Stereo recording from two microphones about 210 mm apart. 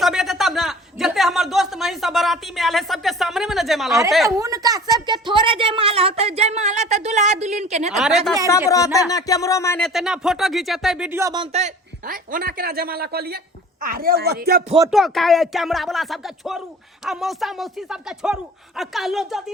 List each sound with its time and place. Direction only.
0.0 s a sound: centre (ahead or behind)
4.1 s speech: centre (ahead or behind)
4.4 s a sound: 15° right (ahead or behind); by 7.9 s 35° right (ahead or behind)
7.9 s speech: centre (ahead or behind)
8.4 s speech: 15° left (ahead or behind)
9.8 s speech: centre (ahead or behind)
11.2 s speech: 15° right (ahead or behind)
11.5 s speech: 40° right (ahead or behind)
14.8 s speech: centre (ahead or behind)